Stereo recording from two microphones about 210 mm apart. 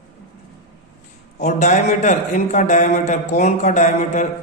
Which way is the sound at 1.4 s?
35° left (ahead or behind).